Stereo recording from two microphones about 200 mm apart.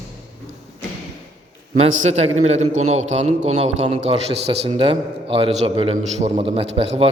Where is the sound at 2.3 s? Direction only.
35° right (ahead or behind).